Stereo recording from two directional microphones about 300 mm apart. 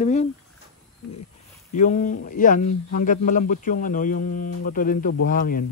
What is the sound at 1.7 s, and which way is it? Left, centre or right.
Speech, left.